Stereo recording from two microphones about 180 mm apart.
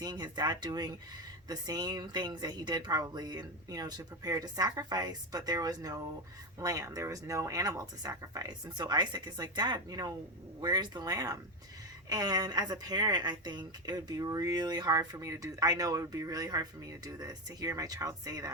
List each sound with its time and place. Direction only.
0.0 s speech: 25° right (ahead or behind)